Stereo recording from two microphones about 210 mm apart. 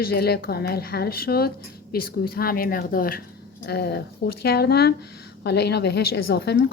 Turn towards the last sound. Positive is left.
turn(degrees=50)  # may be behind; listen again after turning